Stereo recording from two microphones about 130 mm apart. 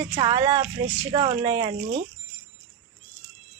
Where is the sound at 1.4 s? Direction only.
25° right (ahead or behind).